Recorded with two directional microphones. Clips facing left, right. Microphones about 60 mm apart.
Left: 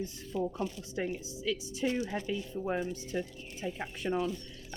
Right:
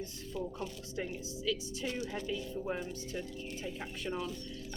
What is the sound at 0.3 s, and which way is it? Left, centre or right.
A woman's voice, left.